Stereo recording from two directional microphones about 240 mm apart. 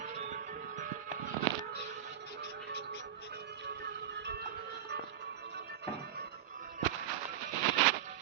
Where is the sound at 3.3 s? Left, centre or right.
Right.